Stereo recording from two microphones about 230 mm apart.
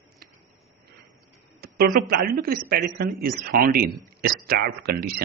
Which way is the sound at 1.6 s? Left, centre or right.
Right.